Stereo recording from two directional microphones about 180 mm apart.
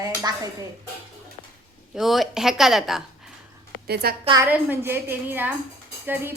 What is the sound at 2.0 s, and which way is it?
A woman's voice, centre (ahead or behind).